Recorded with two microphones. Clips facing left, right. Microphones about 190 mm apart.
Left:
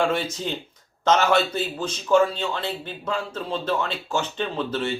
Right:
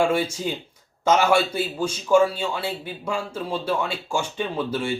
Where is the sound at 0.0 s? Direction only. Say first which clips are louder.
Right 2 dB; 10° right (ahead or behind).